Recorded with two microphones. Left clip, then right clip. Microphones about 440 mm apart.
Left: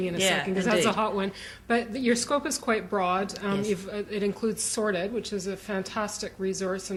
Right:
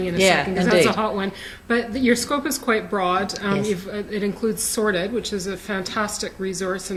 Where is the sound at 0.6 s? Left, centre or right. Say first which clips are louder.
Right 5 dB; left.